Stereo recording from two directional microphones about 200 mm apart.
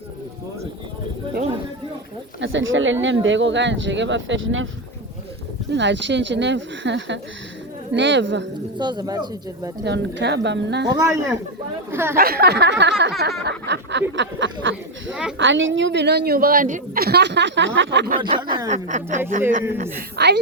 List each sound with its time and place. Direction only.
2.4 s speech: 70° right (ahead or behind)
5.7 s a woman's voice: 65° right (ahead or behind)
8.8 s speech: 20° right (ahead or behind)
9.8 s a woman's voice: 60° right (ahead or behind)
10.9 s a man's voice: 15° right (ahead or behind)
12.1 s a sound: 50° right (ahead or behind)
13.0 s a woman's voice: 55° right (ahead or behind)
15.1 s a woman's voice: 5° right (ahead or behind)
15.4 s a woman's voice: 70° right (ahead or behind)
18.2 s speech: 20° right (ahead or behind)
18.7 s a man's voice: 35° right (ahead or behind)
20.1 s a woman's voice: 60° right (ahead or behind)